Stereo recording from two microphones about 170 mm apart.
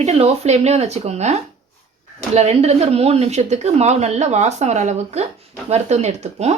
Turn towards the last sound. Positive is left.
turn(degrees=-40)  # may be behind; listen again after turning